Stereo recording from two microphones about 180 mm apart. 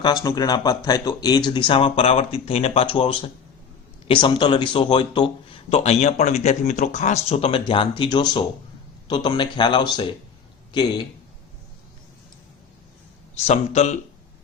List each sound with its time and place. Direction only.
0.0 s a man's voice: 20° left (ahead or behind)
13.3 s speech: 40° left (ahead or behind)